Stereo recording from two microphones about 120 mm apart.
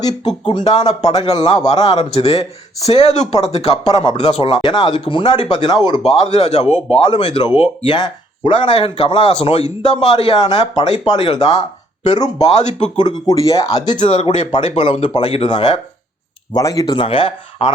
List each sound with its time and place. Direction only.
0.0 s speech: 35° left (ahead or behind)
2.1 s speech: 55° left (ahead or behind)
3.8 s speech: 35° left (ahead or behind)
6.0 s speech: 60° left (ahead or behind)
10.3 s speech: 35° left (ahead or behind)
12.5 s speech: 80° left
13.0 s speech: 35° left (ahead or behind)
14.2 s speech: 60° left (ahead or behind)
14.5 s speech: 45° left (ahead or behind)
16.5 s speech: 30° left (ahead or behind)